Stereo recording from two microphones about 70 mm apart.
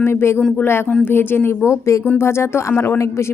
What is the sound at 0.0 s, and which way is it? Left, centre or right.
A woman's voice, left.